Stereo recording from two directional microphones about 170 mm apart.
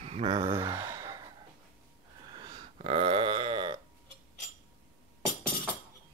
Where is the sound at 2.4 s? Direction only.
25° right (ahead or behind).